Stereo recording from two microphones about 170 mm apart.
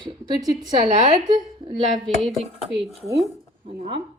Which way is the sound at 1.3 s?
25° right (ahead or behind).